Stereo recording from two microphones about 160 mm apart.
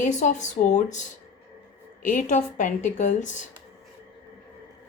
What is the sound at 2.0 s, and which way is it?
A woman's voice, 50° left (ahead or behind).